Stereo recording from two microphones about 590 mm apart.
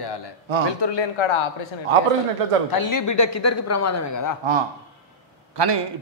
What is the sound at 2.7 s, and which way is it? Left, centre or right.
Speech, left.